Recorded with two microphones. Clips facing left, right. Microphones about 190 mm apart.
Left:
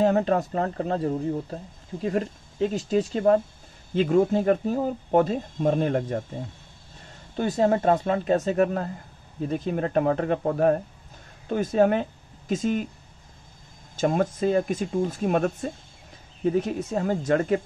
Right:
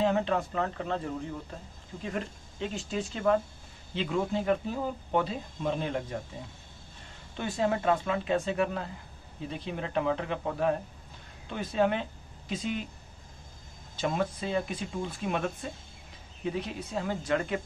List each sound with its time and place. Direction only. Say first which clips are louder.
0.0 s speech: left 6 dB; 45° left (ahead or behind)
7.3 s speech: left 7 dB; 40° left (ahead or behind)
13.9 s speech: left 7 dB; 45° left (ahead or behind)